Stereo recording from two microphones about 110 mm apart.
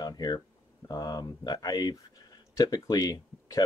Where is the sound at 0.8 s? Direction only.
35° left (ahead or behind).